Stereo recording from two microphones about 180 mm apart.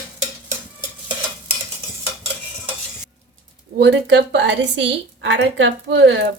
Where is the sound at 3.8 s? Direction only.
80° right.